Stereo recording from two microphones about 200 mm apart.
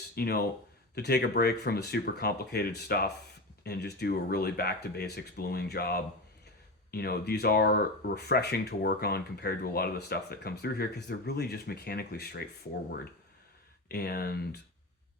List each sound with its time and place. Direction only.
0.2 s speech: 50° left (ahead or behind)
13.8 s speech: 50° left (ahead or behind)